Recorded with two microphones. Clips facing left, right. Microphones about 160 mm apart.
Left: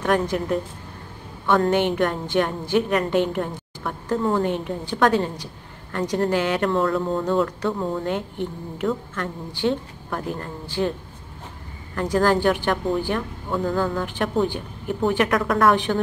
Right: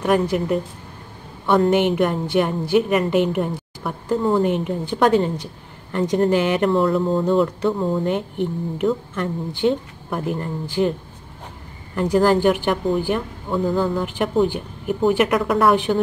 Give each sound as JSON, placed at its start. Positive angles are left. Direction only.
{"t": 0.0, "sound": "speech", "side_deg": -10}
{"t": 1.6, "sound": "speech", "side_deg": -10}
{"t": 7.1, "sound": "speech", "side_deg": -5}
{"t": 7.3, "sound": "speech", "side_deg": -25}
{"t": 11.9, "sound": "a woman's voice", "side_deg": -15}